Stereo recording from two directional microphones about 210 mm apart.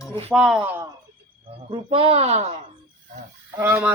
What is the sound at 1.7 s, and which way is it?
Speech, 25° right (ahead or behind).